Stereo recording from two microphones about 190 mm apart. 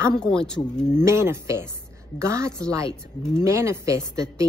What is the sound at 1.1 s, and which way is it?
Speech, 15° right (ahead or behind).